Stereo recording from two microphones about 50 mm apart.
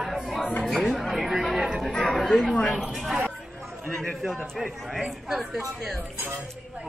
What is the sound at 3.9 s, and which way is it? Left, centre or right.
Speech, centre.